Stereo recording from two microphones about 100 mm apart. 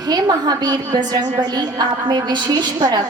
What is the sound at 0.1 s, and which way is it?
A woman's voice, 40° right (ahead or behind).